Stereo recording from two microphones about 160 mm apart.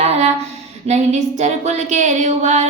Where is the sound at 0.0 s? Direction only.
45° right (ahead or behind).